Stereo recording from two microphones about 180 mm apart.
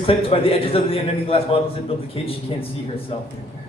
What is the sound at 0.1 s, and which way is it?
A man's voice, 30° left (ahead or behind).